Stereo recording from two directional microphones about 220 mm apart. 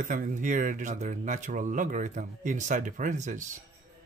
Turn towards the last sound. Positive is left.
turn(degrees=-35)  # may be behind; listen again after turning